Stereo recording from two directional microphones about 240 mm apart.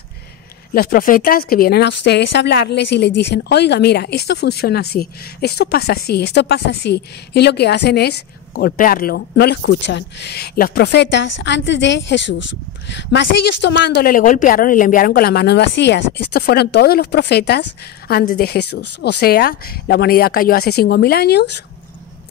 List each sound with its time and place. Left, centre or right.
0.7 s speech: left